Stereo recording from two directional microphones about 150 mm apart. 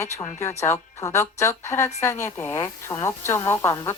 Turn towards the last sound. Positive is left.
turn(degrees=15)  # may be behind; listen again after turning